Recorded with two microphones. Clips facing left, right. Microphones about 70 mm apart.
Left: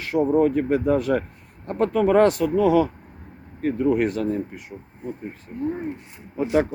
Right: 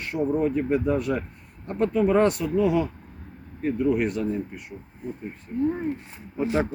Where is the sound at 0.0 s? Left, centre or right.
Left.